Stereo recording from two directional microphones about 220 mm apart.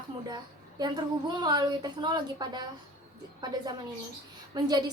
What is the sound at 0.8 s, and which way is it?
A woman's voice, 20° right (ahead or behind).